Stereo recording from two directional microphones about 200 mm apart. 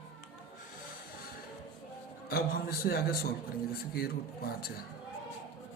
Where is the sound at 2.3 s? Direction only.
50° left (ahead or behind).